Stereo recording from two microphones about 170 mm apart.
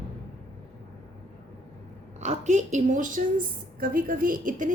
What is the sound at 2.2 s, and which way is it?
A woman's voice, 45° right (ahead or behind).